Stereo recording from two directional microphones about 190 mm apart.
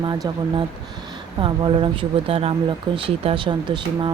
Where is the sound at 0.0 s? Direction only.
25° right (ahead or behind).